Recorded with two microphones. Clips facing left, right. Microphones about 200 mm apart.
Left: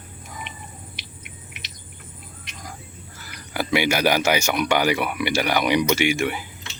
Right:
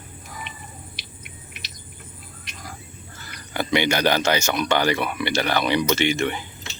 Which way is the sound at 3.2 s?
5° left (ahead or behind).